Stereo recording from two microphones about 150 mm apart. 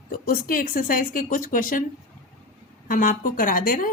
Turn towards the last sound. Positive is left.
turn(degrees=70)  # may be behind; listen again after turning